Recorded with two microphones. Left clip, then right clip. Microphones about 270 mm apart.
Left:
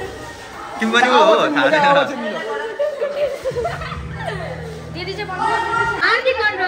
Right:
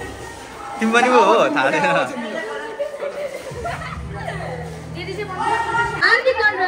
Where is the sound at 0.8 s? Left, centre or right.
Centre.